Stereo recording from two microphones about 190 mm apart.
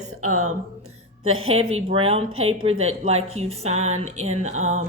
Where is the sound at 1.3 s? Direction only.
90° right.